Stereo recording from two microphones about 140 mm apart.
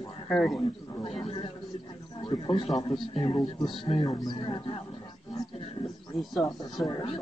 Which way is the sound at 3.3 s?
35° left (ahead or behind).